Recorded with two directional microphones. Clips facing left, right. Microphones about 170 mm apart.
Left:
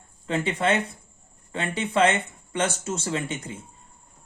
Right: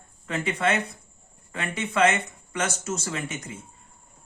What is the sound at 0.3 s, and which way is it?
A man's voice, 30° left (ahead or behind).